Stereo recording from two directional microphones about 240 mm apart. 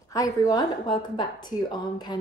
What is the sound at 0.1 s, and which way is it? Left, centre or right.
A woman's voice, centre.